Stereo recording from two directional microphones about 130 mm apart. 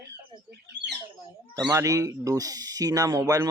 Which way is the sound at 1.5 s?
20° right (ahead or behind).